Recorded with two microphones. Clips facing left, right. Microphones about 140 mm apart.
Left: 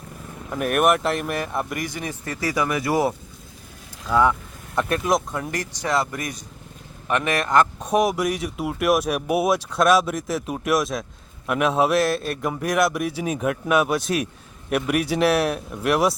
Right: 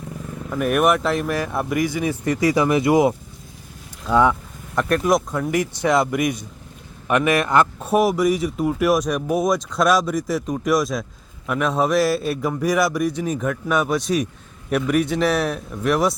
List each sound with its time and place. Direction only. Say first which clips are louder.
0.5 s speech: right 1 dB; centre (ahead or behind)
2.2 s speech: right 6 dB; 20° right (ahead or behind)
4.7 s speech: right 3 dB; centre (ahead or behind)
5.9 s speech: right 5 dB; 15° right (ahead or behind); by 16.1 s 5° left (ahead or behind)